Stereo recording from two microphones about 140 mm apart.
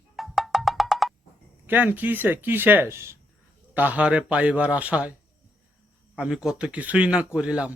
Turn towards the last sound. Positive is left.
turn(degrees=-10)  # may be behind; listen again after turning